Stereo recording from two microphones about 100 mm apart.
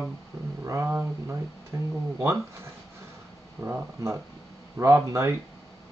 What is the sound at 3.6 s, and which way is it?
Speech, 25° right (ahead or behind).